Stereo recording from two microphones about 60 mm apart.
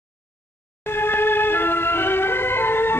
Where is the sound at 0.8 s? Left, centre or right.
Left.